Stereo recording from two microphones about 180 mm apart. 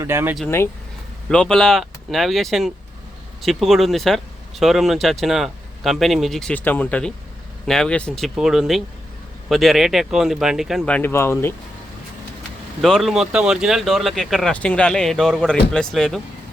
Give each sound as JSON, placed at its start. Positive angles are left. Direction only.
{"t": 0.0, "sound": "speech", "side_deg": -15}
{"t": 1.3, "sound": "speech", "side_deg": 5}
{"t": 12.8, "sound": "speech", "side_deg": 0}